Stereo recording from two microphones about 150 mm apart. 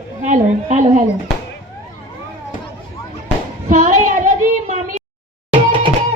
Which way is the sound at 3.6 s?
60° right (ahead or behind).